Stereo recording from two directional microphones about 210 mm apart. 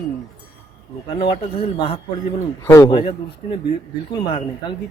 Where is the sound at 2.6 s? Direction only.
15° left (ahead or behind).